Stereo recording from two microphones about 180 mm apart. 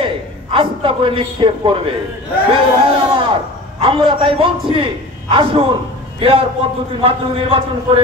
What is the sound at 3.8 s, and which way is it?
A man's voice, 30° right (ahead or behind).